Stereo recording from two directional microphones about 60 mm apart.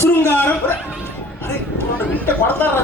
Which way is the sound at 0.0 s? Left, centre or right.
Left.